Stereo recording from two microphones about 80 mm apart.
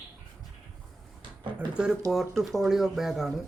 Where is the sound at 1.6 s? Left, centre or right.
Centre.